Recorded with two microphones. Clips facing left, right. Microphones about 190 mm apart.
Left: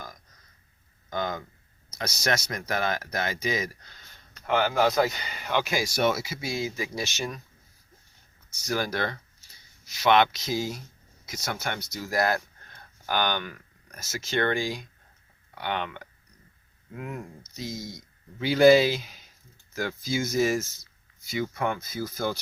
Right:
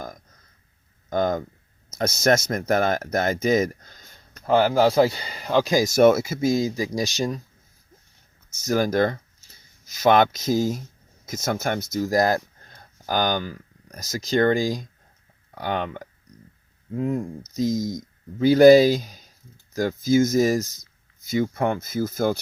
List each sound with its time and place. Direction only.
1.1 s speech: 45° right (ahead or behind)
8.5 s speech: 45° right (ahead or behind)